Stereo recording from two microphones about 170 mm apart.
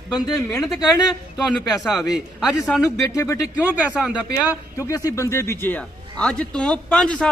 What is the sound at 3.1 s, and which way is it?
Speech, 15° left (ahead or behind).